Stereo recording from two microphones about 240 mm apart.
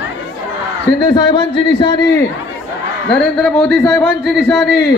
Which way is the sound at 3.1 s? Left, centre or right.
Centre.